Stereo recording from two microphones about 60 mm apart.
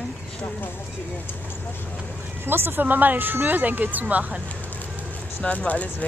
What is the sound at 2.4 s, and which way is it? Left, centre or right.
Speech, right.